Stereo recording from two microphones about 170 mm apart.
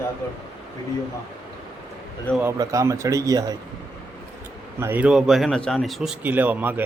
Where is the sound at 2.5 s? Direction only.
20° right (ahead or behind).